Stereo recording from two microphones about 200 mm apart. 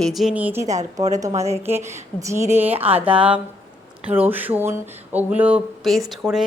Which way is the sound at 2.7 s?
30° right (ahead or behind).